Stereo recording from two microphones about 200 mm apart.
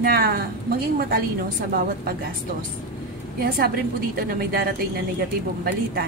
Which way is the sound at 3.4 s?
50° right (ahead or behind).